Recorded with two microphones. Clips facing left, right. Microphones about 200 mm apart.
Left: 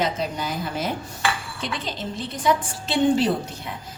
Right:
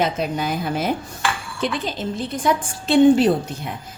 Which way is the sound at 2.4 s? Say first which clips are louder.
Even; 50° right (ahead or behind).